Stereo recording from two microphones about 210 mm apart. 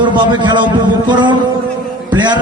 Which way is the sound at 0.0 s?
20° right (ahead or behind).